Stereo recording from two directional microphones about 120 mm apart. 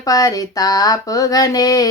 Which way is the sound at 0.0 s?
30° left (ahead or behind).